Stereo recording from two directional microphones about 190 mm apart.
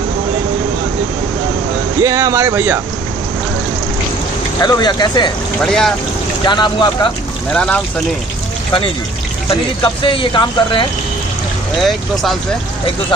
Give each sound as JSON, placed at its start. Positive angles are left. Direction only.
{"t": 2.0, "sound": "speech", "side_deg": -20}
{"t": 4.6, "sound": "speech", "side_deg": 20}
{"t": 5.7, "sound": "speech", "side_deg": 0}
{"t": 6.4, "sound": "speech", "side_deg": 25}
{"t": 7.5, "sound": "speech", "side_deg": 5}
{"t": 10.0, "sound": "speech", "side_deg": 25}
{"t": 11.8, "sound": "speech", "side_deg": 0}